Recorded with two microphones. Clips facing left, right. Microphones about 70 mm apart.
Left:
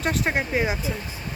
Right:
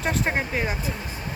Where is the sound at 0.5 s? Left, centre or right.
Centre.